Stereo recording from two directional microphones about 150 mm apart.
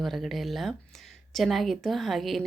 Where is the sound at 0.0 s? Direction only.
Centre (ahead or behind).